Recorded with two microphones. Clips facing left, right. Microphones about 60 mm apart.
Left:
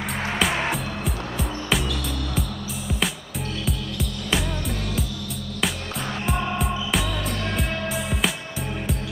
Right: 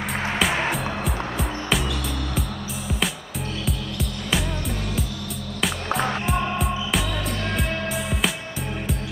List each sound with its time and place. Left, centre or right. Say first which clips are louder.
0.4 s music: right 1 dB; centre
3.6 s music: even; centre
6.2 s music: right 1 dB; centre